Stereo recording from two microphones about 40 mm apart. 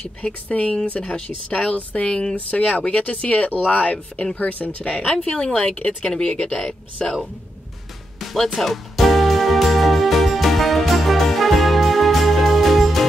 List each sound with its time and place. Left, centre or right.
0.2 s speech: left
1.8 s speech: left
2.0 s speech: left
2.3 s speech: left
4.8 s speech: left
8.5 s music: centre